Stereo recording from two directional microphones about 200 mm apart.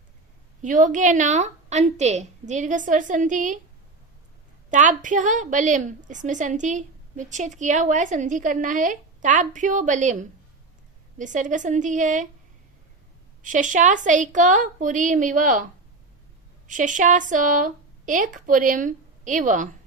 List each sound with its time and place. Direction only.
0.6 s a woman's voice: 40° right (ahead or behind)
4.7 s a woman's voice: 40° right (ahead or behind)
13.4 s a woman's voice: 40° right (ahead or behind)
16.6 s speech: 40° right (ahead or behind)